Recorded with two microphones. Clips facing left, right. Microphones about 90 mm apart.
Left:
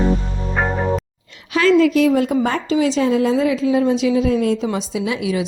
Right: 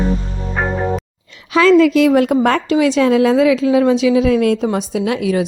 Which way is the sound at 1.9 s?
80° right.